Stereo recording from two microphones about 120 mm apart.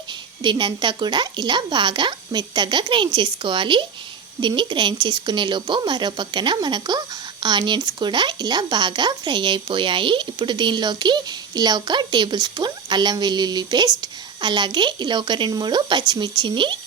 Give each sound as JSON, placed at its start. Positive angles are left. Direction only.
{"t": 0.1, "sound": "speech", "side_deg": -40}